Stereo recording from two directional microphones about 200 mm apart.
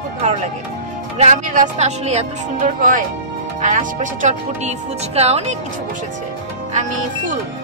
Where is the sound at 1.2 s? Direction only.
35° right (ahead or behind).